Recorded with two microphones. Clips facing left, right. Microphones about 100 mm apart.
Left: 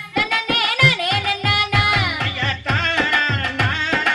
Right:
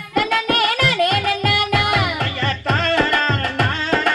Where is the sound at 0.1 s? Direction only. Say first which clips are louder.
Right 3 dB; 45° right (ahead or behind).